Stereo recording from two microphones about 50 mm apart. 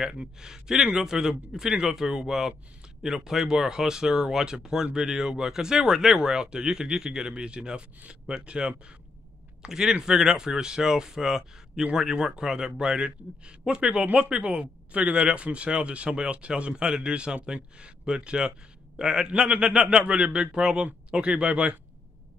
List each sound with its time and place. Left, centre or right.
0.0 s speech: centre
9.7 s speech: centre